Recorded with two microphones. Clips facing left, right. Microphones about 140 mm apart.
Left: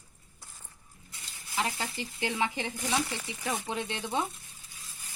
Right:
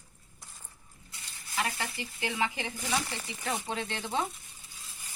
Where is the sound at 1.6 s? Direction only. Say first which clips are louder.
Left 1 dB; 15° left (ahead or behind).